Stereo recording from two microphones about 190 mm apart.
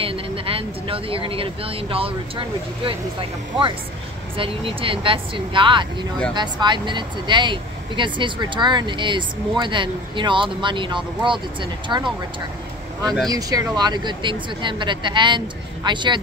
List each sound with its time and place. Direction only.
0.0 s speech: 30° right (ahead or behind)
13.3 s speech: 20° right (ahead or behind)